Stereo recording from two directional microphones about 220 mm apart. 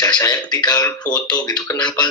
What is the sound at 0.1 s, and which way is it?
Speech, 15° left (ahead or behind).